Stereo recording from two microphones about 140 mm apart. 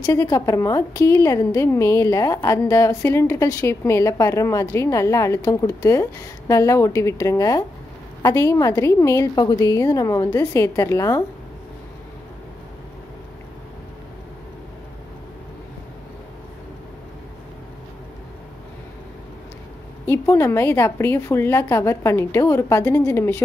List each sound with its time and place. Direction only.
0.0 s a woman's voice: 25° left (ahead or behind)
20.1 s a woman's voice: 20° left (ahead or behind)